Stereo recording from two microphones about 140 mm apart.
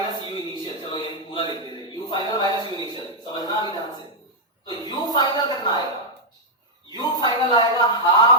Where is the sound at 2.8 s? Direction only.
30° left (ahead or behind).